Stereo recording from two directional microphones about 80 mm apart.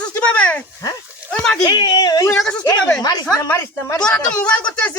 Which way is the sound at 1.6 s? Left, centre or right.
Left.